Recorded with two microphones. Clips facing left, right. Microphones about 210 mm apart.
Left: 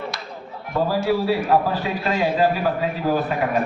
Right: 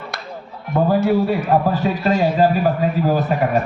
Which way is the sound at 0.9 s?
55° right (ahead or behind).